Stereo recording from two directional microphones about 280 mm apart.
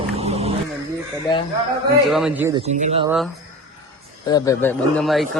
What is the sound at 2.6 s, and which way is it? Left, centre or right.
Speech, right.